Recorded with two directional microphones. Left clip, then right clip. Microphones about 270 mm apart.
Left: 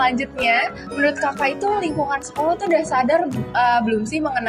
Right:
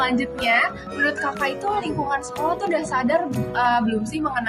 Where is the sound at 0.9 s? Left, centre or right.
Centre.